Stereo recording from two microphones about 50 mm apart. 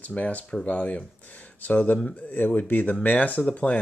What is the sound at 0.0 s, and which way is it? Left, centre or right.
Speech, left.